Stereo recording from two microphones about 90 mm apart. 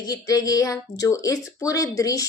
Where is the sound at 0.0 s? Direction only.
45° left (ahead or behind).